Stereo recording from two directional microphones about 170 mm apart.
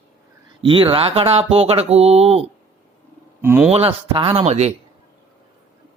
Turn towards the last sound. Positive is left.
turn(degrees=-40)  # may be behind; listen again after turning